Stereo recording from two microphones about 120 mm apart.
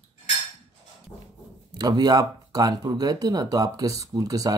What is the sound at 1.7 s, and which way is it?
Speech, 35° right (ahead or behind).